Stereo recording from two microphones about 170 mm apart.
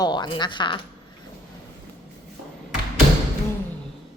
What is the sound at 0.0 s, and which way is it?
Speech, 25° left (ahead or behind).